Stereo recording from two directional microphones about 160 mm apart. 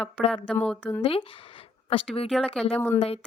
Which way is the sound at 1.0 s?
35° left (ahead or behind).